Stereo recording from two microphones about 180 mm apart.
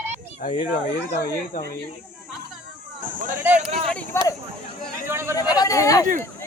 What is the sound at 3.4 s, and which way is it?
Speech, 10° right (ahead or behind).